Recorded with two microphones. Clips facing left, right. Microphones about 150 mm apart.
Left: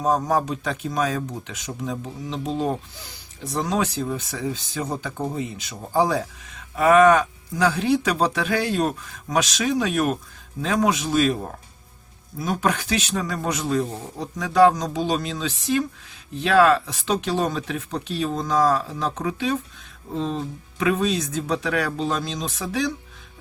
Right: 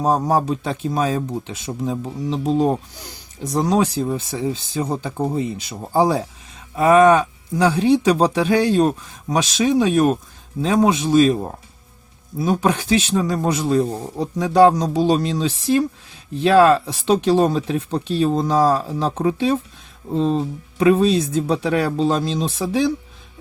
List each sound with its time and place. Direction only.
0.0 s speech: 35° right (ahead or behind)
12.4 s speech: 30° right (ahead or behind)